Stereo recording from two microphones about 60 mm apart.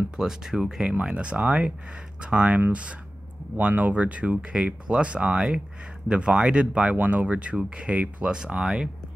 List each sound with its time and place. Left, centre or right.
0.2 s speech: centre